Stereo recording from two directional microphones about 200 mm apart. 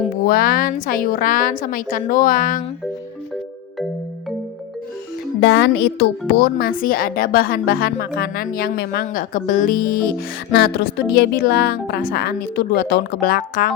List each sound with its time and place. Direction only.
0.3 s speech: 50° left (ahead or behind)
5.4 s speech: 55° left (ahead or behind)